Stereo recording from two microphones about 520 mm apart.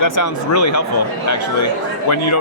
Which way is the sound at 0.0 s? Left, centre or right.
Left.